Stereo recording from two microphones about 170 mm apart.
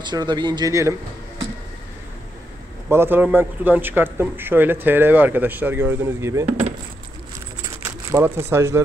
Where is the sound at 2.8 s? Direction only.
15° right (ahead or behind).